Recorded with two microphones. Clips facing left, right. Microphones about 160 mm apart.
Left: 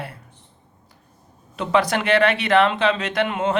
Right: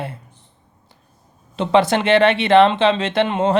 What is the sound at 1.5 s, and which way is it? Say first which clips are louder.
Speech: right 4 dB; 25° right (ahead or behind).